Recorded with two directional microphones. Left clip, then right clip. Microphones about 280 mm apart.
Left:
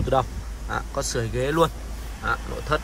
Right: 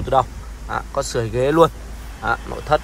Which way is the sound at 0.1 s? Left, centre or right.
Centre.